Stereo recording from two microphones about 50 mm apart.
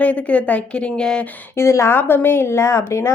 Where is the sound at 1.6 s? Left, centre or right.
Left.